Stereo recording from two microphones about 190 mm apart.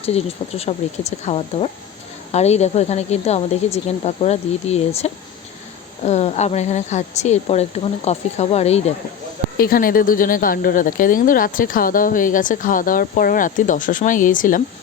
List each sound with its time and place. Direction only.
0.0 s a woman's voice: 35° left (ahead or behind)
9.6 s speech: 50° left (ahead or behind)